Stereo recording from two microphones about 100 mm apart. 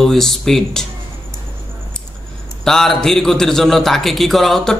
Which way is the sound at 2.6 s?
5° left (ahead or behind).